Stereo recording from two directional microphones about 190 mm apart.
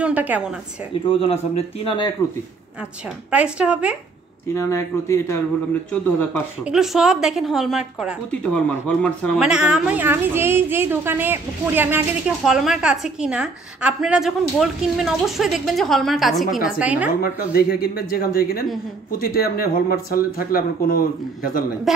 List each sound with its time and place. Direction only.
0.0 s a woman's voice: 10° right (ahead or behind)
1.1 s a man's voice: 30° left (ahead or behind)
3.3 s a woman's voice: 5° right (ahead or behind)
4.6 s a man's voice: 15° left (ahead or behind)
6.6 s a woman's voice: 5° right (ahead or behind)
9.5 s a woman's voice: 5° right (ahead or behind)
17.2 s speech: 55° left (ahead or behind)
21.9 s a woman's voice: centre (ahead or behind)